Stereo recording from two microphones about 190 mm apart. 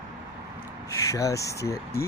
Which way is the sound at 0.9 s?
15° left (ahead or behind).